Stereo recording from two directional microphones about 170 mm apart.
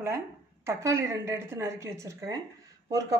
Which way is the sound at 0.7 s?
15° right (ahead or behind).